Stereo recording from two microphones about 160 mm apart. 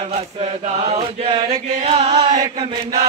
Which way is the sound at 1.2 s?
40° right (ahead or behind).